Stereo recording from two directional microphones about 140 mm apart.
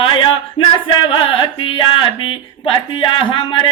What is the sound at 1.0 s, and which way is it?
Carnatic music, 40° left (ahead or behind).